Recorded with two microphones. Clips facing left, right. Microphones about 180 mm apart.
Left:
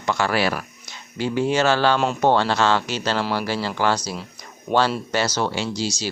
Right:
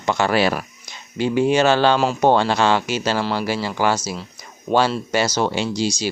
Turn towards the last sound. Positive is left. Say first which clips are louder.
# right 4 dB
turn(degrees=-15)  # may be behind; listen again after turning